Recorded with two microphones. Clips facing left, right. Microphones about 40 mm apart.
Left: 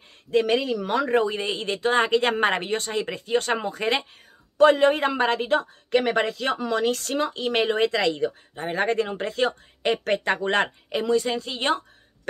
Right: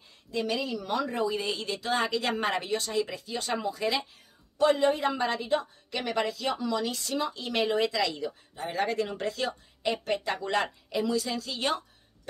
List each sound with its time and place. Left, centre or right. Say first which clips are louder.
0.3 s speech: left 9 dB; left
7.2 s speech: left 5 dB; left
10.0 s speech: left 7 dB; left